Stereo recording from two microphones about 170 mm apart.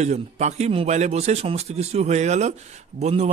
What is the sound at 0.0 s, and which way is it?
A man's voice, 40° right (ahead or behind).